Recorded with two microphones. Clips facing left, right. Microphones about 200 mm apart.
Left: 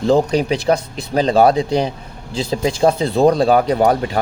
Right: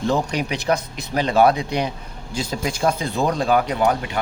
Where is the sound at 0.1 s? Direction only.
30° left (ahead or behind).